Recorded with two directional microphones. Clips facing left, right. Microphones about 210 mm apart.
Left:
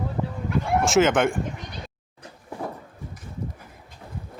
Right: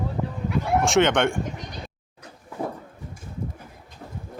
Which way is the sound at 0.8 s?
Centre (ahead or behind).